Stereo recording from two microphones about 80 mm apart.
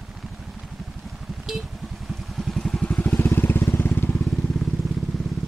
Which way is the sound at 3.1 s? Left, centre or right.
Left.